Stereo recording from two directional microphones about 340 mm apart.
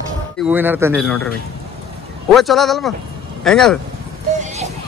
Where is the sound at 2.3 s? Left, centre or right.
Centre.